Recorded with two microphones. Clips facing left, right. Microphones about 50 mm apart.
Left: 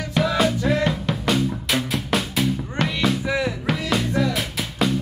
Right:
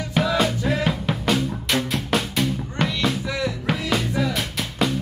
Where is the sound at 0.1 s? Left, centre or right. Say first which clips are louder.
Left 1 dB; centre.